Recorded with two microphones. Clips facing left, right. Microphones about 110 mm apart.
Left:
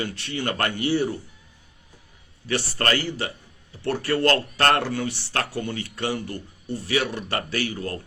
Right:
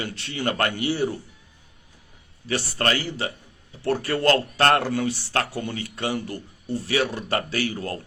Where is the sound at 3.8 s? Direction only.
25° right (ahead or behind).